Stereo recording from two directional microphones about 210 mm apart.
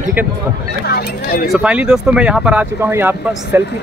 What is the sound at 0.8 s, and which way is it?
Speech, 45° left (ahead or behind).